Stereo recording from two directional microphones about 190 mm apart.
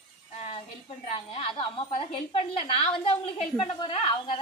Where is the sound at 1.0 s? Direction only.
30° left (ahead or behind).